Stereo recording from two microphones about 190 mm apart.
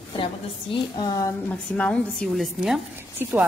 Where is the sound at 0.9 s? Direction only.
20° left (ahead or behind).